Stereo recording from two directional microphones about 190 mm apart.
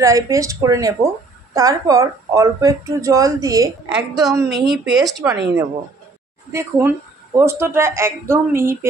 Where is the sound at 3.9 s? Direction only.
5° right (ahead or behind).